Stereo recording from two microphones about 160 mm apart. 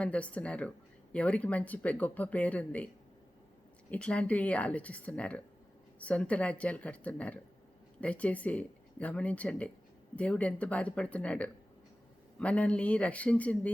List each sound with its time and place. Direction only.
0.0 s speech: 10° left (ahead or behind)
3.9 s speech: 5° left (ahead or behind)